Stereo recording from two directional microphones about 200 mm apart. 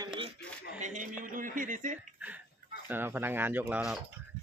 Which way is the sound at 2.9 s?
10° right (ahead or behind).